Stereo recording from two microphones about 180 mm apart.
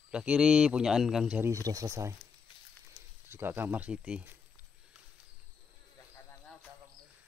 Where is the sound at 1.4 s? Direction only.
20° right (ahead or behind).